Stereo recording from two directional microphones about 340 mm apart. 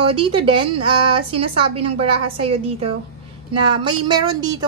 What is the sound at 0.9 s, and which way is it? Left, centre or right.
Speech, right.